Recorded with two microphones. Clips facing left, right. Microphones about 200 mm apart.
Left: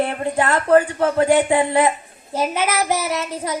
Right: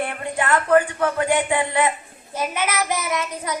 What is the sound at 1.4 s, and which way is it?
Child singing, 35° left (ahead or behind).